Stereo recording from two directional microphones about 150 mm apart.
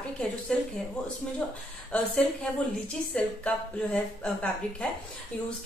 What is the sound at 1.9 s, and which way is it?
Speech, 5° left (ahead or behind).